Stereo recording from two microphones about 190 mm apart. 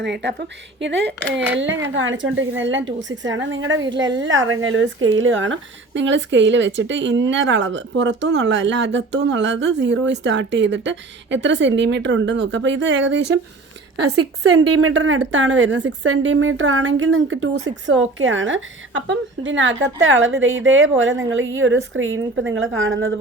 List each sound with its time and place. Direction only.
0.0 s a woman's voice: 65° right (ahead or behind)
14.8 s a woman's voice: 90° right